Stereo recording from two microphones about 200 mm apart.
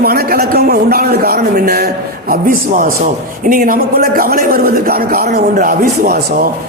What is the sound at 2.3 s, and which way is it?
Speech, 45° right (ahead or behind).